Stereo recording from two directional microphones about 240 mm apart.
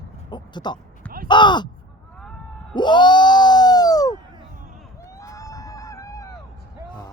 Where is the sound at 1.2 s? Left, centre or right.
Centre.